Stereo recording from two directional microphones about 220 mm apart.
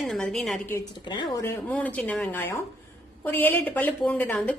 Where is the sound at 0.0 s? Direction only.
Centre (ahead or behind).